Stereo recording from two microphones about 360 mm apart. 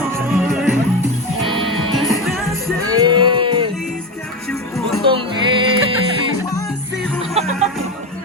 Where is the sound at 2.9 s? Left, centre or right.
Centre.